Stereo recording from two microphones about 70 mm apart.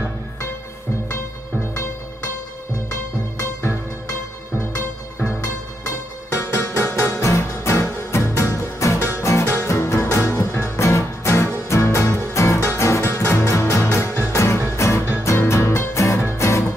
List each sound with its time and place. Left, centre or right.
5.4 s music: left